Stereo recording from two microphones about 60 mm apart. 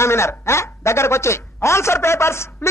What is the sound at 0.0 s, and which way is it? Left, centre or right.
A man's voice, left.